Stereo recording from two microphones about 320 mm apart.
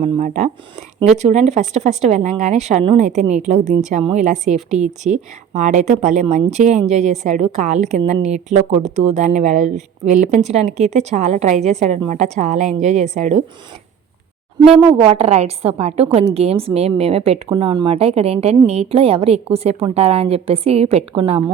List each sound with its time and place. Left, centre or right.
0.0 s speech: right
14.8 s speech: centre